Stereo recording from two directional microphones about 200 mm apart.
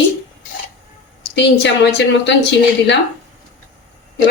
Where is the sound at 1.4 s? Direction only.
60° left (ahead or behind).